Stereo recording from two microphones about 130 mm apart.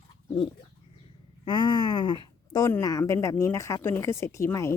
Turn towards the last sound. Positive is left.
turn(degrees=20)  # may be behind; listen again after turning